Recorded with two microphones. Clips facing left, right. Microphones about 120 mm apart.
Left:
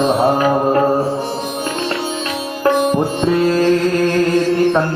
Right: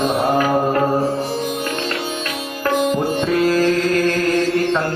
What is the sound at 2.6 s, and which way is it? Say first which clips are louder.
Music: left 3 dB; 25° left (ahead or behind).